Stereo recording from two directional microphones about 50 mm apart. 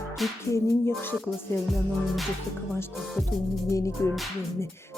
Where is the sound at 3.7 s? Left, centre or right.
Left.